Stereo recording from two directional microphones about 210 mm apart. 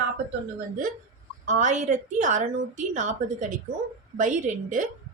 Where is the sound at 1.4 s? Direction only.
35° right (ahead or behind).